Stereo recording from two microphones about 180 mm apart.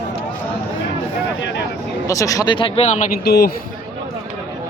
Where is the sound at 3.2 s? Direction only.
60° left (ahead or behind).